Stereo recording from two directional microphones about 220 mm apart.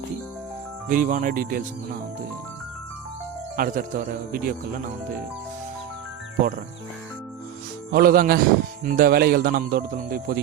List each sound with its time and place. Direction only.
0.9 s speech: 35° right (ahead or behind)
3.6 s speech: 35° right (ahead or behind)
7.9 s speech: 45° right (ahead or behind)